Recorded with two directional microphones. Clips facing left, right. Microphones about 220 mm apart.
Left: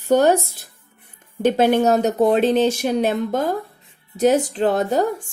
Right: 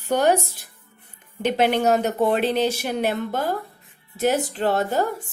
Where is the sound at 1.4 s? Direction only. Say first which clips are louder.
Left 4 dB; 45° left (ahead or behind).